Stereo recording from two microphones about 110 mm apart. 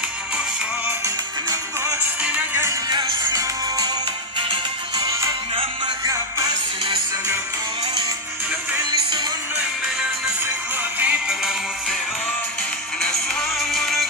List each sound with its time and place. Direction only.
1.0 s music: 30° right (ahead or behind)
2.2 s music: 15° right (ahead or behind)
2.9 s music: 35° right (ahead or behind)
11.0 s music: 15° right (ahead or behind)
13.0 s music: 5° left (ahead or behind)